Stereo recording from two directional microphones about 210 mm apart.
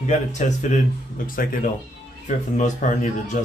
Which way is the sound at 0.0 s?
35° left (ahead or behind).